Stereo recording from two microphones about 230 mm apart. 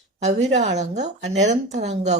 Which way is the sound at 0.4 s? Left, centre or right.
Right.